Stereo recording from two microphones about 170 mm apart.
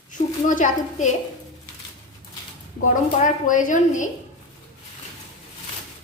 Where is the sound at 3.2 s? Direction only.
50° left (ahead or behind).